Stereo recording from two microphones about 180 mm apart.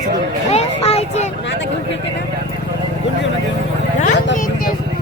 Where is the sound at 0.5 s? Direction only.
40° left (ahead or behind).